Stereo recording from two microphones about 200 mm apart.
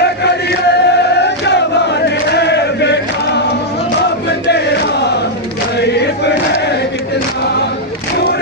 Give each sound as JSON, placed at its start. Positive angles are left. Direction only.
{"t": 0.0, "sound": "chant", "side_deg": 55}